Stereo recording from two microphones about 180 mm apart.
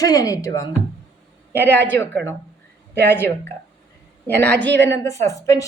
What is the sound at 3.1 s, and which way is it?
Speech, 10° left (ahead or behind).